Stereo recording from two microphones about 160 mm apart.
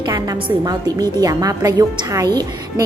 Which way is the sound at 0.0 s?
25° right (ahead or behind).